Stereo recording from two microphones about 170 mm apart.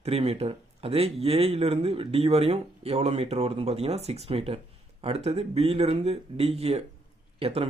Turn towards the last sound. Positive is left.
turn(degrees=-35)  # may be behind; listen again after turning